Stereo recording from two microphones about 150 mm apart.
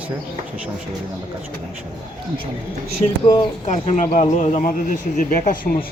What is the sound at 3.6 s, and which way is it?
A man's voice, 50° left (ahead or behind).